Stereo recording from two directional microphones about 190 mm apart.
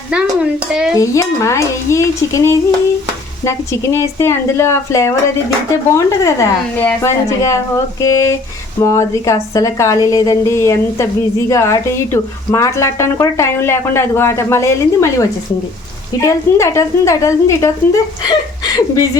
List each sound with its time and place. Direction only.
0.7 s stir: 5° right (ahead or behind)
0.9 s a woman's voice: 15° left (ahead or behind)